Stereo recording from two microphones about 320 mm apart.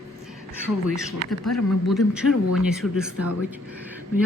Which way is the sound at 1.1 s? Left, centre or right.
Centre.